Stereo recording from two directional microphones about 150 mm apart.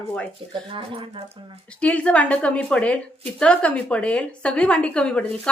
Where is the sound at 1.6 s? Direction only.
5° left (ahead or behind).